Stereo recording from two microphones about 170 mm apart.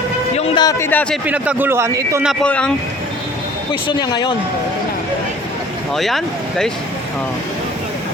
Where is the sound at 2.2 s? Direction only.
Centre (ahead or behind).